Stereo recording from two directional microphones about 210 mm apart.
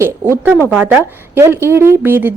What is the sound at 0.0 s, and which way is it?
A woman's voice, 10° right (ahead or behind).